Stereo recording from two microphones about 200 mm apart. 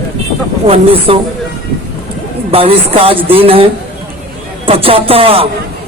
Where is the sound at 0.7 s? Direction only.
30° right (ahead or behind).